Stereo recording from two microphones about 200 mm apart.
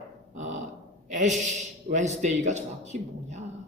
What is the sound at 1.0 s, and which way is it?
A man's voice, 35° right (ahead or behind).